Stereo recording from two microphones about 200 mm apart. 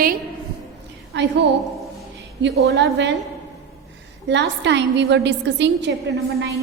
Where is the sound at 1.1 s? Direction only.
60° right (ahead or behind).